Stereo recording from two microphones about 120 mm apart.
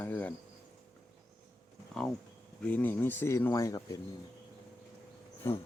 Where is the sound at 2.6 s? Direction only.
15° left (ahead or behind).